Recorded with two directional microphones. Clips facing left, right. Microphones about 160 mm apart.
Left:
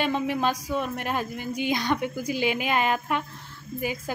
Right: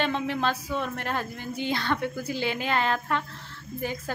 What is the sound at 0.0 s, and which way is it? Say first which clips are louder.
A woman's voice: left 2 dB; 10° left (ahead or behind).